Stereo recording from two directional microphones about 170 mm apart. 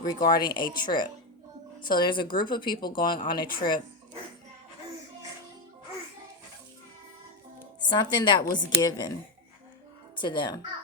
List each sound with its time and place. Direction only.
0.0 s a woman's voice: 25° left (ahead or behind)
7.8 s a woman's voice: 25° left (ahead or behind)
10.2 s a woman's voice: 25° left (ahead or behind)